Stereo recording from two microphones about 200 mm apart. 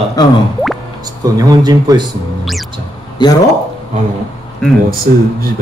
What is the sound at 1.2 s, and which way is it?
Speech, 20° right (ahead or behind).